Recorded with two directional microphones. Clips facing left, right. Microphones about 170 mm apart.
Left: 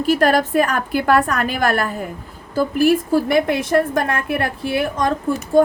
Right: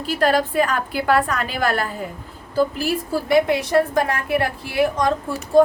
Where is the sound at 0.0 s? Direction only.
45° left (ahead or behind).